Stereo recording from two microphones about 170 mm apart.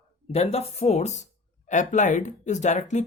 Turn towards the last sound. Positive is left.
turn(degrees=45)  # may be behind; listen again after turning